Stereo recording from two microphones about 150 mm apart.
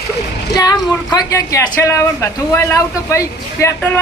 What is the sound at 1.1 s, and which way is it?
Speech, 25° left (ahead or behind).